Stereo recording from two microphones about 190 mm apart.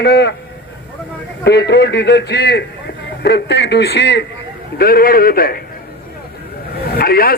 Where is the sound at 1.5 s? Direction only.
65° left (ahead or behind).